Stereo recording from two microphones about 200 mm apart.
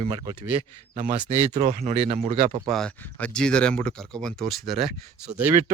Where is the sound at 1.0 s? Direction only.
40° right (ahead or behind).